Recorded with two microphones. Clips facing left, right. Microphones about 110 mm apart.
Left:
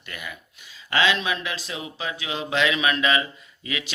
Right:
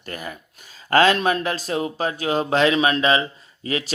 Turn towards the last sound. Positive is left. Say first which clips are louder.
# right 6 dB
turn(degrees=-40)  # may be behind; listen again after turning